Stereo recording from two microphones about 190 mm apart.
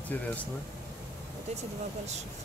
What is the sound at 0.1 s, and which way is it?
Speech, 10° left (ahead or behind).